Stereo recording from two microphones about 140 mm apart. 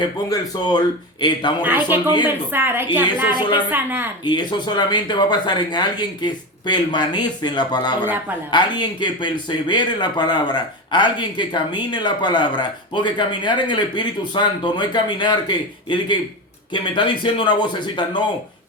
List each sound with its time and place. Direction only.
0.0 s speech: 30° left (ahead or behind)
1.6 s a woman's voice: 15° right (ahead or behind)
4.2 s speech: 30° left (ahead or behind)